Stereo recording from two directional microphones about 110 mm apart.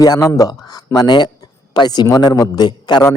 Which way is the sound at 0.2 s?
35° left (ahead or behind).